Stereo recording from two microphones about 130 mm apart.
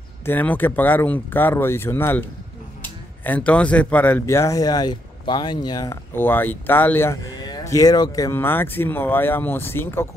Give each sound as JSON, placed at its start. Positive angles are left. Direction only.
{"t": 0.2, "sound": "speech", "side_deg": 15}
{"t": 6.1, "sound": "speech", "side_deg": 15}
{"t": 8.4, "sound": "speech", "side_deg": 15}